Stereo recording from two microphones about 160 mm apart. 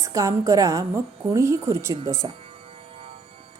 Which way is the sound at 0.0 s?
20° right (ahead or behind).